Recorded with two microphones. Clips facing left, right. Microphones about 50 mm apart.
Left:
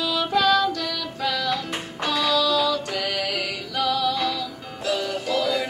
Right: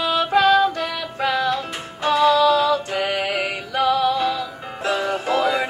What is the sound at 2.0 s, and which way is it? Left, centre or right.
Music, right.